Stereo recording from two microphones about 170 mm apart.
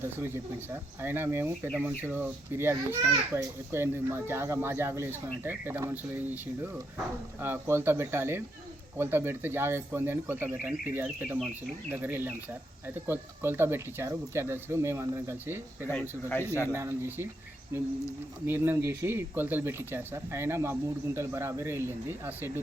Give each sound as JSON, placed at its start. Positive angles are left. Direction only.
{"t": 0.0, "sound": "a child's voice", "side_deg": -15}
{"t": 15.9, "sound": "speech", "side_deg": 10}
{"t": 16.7, "sound": "a child's voice", "side_deg": -15}